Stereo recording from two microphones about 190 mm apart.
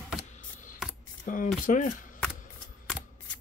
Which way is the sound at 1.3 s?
45° left (ahead or behind).